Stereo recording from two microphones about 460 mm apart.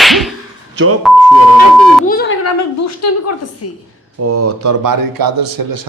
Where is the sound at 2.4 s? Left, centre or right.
Left.